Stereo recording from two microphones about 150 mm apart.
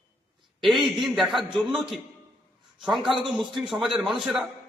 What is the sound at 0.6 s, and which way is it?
A man's voice, centre (ahead or behind).